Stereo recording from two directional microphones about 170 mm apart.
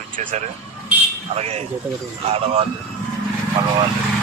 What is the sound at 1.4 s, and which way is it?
A man's voice, 40° right (ahead or behind).